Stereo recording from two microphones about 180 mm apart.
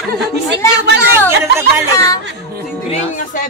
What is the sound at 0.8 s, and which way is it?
Speech, 70° right (ahead or behind).